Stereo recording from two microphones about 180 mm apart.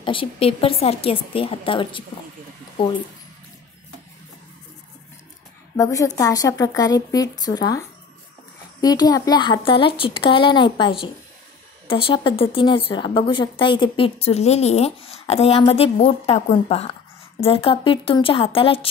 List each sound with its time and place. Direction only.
0.0 s a woman's voice: 30° left (ahead or behind)
5.8 s speech: 20° left (ahead or behind)
8.8 s a woman's voice: 20° left (ahead or behind)